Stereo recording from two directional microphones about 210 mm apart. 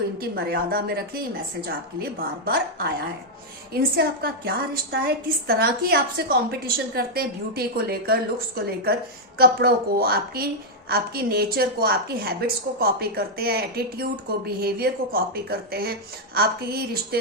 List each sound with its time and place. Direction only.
0.2 s a woman's voice: 45° right (ahead or behind)